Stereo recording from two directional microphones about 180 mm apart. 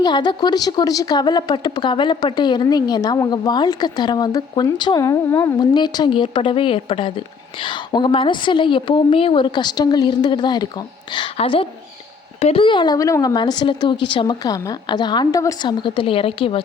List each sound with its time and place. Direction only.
0.0 s a woman's voice: 25° left (ahead or behind)